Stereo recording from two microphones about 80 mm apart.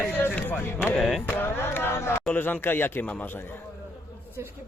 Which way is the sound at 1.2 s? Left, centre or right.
Left.